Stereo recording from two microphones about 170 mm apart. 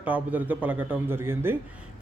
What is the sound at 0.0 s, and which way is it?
Speech, 10° right (ahead or behind).